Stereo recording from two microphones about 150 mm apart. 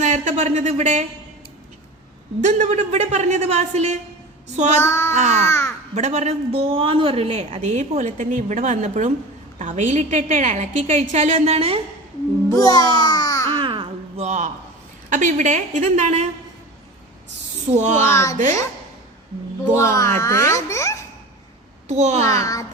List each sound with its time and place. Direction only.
0.0 s speech: 55° right (ahead or behind)
2.4 s a woman's voice: 55° right (ahead or behind)
4.8 s child singing: 15° left (ahead or behind)
5.1 s a woman's voice: 50° right (ahead or behind)
5.5 s child singing: 15° left (ahead or behind)
5.9 s a woman's voice: 50° right (ahead or behind)
12.5 s music: 25° left (ahead or behind)
13.7 s a sound: 35° right (ahead or behind)
14.3 s a man's voice: 55° right (ahead or behind)
17.7 s a woman's voice: 50° right (ahead or behind)
18.0 s a child's voice: 20° left (ahead or behind)
19.7 s a child's voice: 20° left (ahead or behind)
21.8 s a woman's voice: 50° right (ahead or behind)
22.2 s a child's voice: 20° left (ahead or behind)